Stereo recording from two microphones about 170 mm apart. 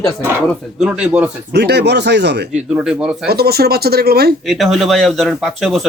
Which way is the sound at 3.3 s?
65° right (ahead or behind).